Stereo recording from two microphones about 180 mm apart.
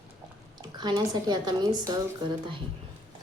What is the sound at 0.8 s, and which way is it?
A woman's voice, 25° right (ahead or behind).